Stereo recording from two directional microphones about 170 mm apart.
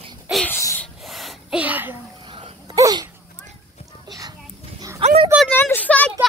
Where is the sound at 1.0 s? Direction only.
Centre (ahead or behind).